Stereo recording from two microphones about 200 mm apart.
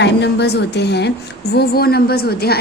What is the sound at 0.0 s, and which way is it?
A woman's voice, 60° left (ahead or behind).